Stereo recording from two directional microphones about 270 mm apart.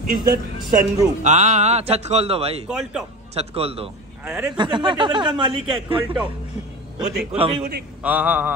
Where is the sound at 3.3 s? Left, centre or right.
Right.